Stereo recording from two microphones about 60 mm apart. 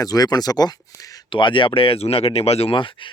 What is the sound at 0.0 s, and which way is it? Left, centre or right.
Speech, left.